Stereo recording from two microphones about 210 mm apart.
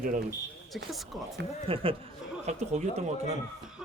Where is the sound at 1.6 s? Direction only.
25° right (ahead or behind).